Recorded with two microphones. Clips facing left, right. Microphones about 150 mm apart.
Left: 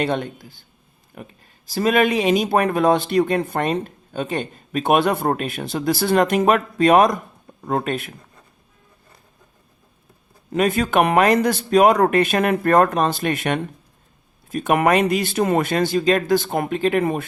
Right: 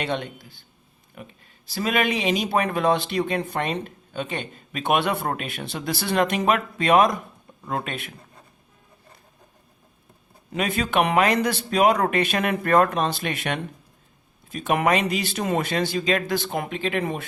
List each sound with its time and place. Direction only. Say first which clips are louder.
0.0 s speech: left 5 dB; 45° left (ahead or behind)
1.6 s speech: left 6 dB; 40° left (ahead or behind)
10.5 s speech: left 5 dB; 45° left (ahead or behind)